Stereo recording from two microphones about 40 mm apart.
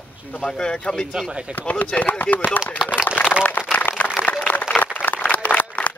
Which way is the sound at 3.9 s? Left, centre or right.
Left.